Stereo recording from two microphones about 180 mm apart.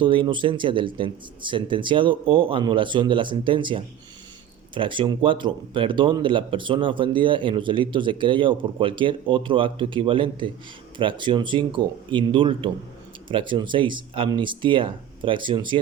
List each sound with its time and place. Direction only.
0.0 s speech: 30° right (ahead or behind)